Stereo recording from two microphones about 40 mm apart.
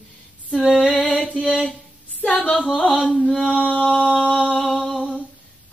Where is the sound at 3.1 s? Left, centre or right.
Centre.